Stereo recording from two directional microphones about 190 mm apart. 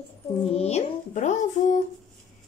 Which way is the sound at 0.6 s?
35° left (ahead or behind).